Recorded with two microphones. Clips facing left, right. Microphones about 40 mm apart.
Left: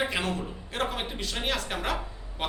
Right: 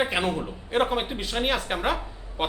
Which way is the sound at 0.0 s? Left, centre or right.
Centre.